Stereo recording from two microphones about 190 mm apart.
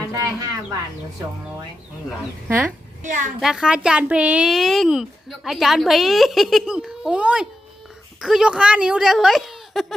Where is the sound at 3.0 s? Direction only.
40° right (ahead or behind).